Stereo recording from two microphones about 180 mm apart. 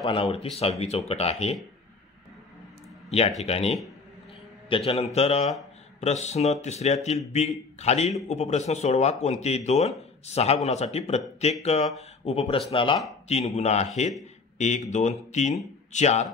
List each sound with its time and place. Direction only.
0.0 s speech: 30° left (ahead or behind)
3.1 s speech: 35° left (ahead or behind)